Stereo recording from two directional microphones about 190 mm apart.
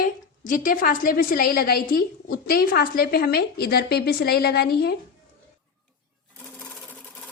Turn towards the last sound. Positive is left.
turn(degrees=5)  # may be behind; listen again after turning